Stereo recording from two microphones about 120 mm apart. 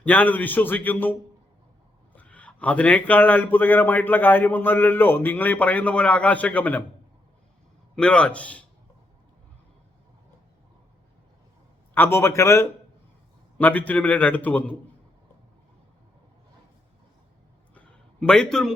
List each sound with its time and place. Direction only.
0.0 s speech: 15° left (ahead or behind)
2.1 s speech: 10° left (ahead or behind)
7.9 s speech: 10° left (ahead or behind)
11.9 s a man's voice: 20° left (ahead or behind)
17.7 s a sound: 5° left (ahead or behind)